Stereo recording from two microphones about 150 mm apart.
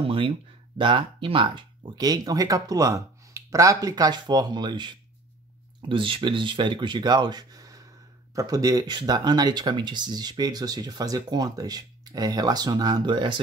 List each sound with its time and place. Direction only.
0.0 s speech: 35° right (ahead or behind)